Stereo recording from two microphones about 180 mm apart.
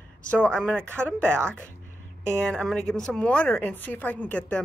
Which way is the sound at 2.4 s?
5° left (ahead or behind).